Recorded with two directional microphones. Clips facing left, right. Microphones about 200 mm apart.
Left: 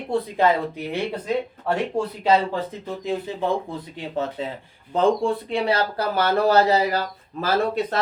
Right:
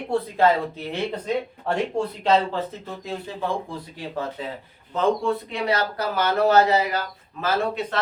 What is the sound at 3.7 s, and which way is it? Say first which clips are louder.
Speech: left 2 dB; 20° left (ahead or behind).